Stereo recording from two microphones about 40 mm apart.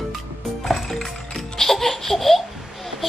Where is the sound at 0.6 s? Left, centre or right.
Centre.